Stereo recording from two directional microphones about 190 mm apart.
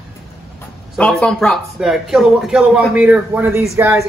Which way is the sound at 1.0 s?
5° left (ahead or behind).